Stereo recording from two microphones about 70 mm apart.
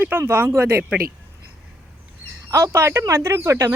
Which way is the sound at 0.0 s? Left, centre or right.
Right.